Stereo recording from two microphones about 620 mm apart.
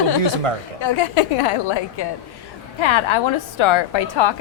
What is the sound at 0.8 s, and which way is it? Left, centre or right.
A woman's voice, left.